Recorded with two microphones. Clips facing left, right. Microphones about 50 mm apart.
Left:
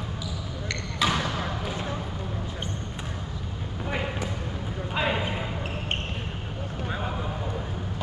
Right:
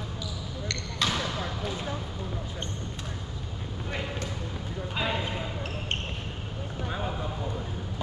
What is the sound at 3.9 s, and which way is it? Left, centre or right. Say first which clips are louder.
Basketball bounce: left 4 dB; centre.